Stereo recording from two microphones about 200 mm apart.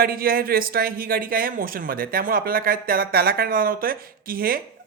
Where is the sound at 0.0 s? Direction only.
50° right (ahead or behind).